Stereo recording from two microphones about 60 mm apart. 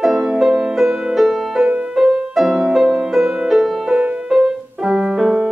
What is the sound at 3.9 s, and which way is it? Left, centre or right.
Music, centre.